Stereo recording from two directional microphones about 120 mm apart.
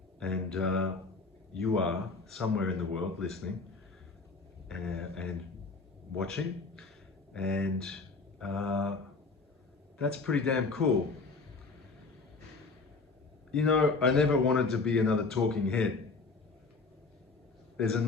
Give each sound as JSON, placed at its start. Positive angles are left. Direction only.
{"t": 0.2, "sound": "speech", "side_deg": 5}
{"t": 4.7, "sound": "a man's voice", "side_deg": 5}
{"t": 10.0, "sound": "speech", "side_deg": 5}
{"t": 13.5, "sound": "speech", "side_deg": 5}
{"t": 17.7, "sound": "a man's voice", "side_deg": 5}